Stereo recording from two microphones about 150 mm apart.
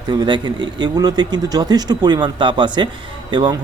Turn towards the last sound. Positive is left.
turn(degrees=-30)  # may be behind; listen again after turning